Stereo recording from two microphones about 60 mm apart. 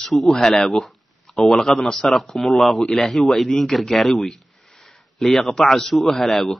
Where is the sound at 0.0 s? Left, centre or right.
Centre.